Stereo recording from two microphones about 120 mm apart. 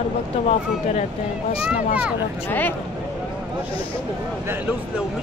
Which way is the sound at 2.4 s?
15° left (ahead or behind).